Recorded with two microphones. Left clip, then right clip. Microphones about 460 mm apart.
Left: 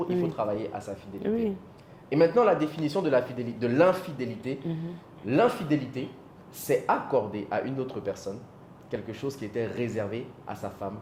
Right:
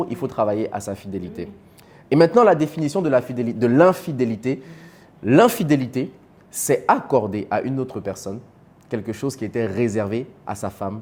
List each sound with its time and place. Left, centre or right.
0.3 s speech: right
2.0 s speech: right